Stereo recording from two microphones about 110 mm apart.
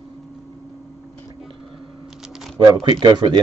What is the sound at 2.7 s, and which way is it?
Speech, 40° right (ahead or behind).